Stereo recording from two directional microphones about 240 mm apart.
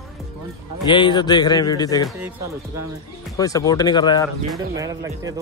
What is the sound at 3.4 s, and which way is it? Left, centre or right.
Speech, centre.